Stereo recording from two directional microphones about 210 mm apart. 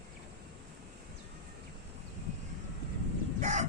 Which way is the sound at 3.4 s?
35° right (ahead or behind).